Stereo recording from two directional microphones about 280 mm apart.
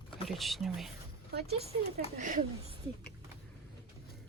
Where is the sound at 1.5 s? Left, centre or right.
Right.